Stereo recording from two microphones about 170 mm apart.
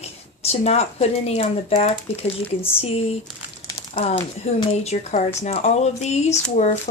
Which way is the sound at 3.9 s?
35° left (ahead or behind).